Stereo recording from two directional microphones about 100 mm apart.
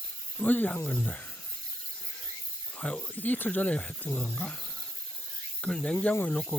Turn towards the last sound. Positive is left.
turn(degrees=10)  # may be behind; listen again after turning